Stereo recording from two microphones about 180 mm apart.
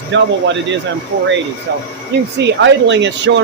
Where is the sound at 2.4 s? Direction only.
85° right.